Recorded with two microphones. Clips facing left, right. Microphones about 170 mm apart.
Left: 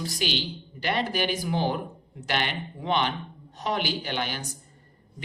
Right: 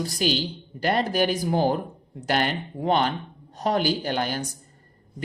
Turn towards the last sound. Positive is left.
turn(degrees=-40)  # may be behind; listen again after turning